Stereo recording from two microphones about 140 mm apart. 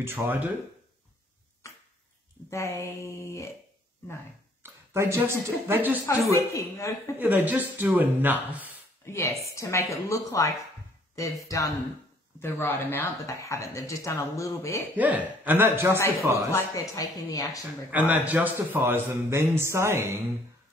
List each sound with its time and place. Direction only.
0.0 s a man's voice: 15° right (ahead or behind)
2.5 s speech: 20° left (ahead or behind)
4.6 s speech: 20° right (ahead or behind)
6.3 s speech: 20° left (ahead or behind)
7.2 s a man's voice: 10° right (ahead or behind)
9.0 s speech: 20° left (ahead or behind)
15.0 s a man's voice: 10° right (ahead or behind)
16.5 s speech: 25° left (ahead or behind)
17.9 s a man's voice: 10° right (ahead or behind)